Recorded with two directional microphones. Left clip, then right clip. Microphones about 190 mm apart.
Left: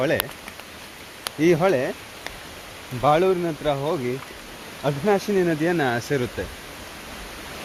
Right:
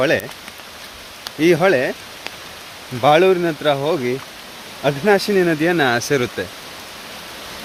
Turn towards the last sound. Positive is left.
turn(degrees=-25)  # may be behind; listen again after turning